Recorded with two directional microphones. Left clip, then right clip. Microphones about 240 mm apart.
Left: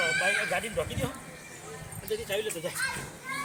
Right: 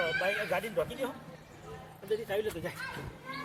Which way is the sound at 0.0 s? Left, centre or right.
Centre.